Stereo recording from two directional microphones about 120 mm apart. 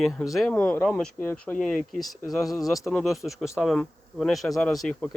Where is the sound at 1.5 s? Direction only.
Centre (ahead or behind).